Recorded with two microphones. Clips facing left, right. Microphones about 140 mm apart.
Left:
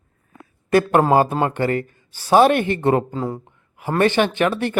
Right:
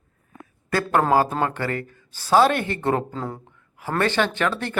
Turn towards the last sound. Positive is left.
turn(degrees=15)  # may be behind; listen again after turning